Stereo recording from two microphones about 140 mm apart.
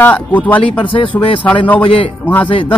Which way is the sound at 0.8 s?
35° left (ahead or behind).